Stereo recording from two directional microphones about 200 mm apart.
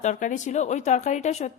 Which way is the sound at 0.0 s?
40° left (ahead or behind).